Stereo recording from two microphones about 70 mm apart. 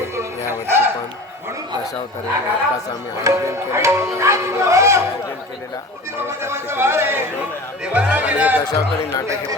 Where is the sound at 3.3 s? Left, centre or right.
Right.